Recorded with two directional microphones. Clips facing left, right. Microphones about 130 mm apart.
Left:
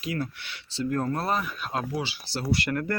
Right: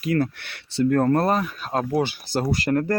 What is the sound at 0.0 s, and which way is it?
Speech, 60° right (ahead or behind).